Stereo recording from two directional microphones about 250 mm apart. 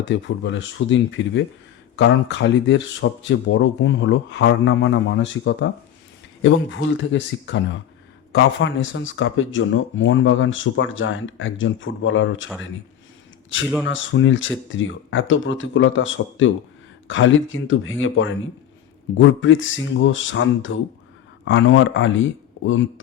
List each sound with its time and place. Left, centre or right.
0.1 s speech: left
13.8 s speech: left